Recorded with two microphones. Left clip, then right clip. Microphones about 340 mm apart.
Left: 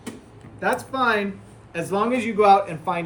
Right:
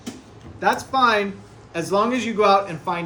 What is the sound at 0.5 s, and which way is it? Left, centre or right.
A man's voice, centre.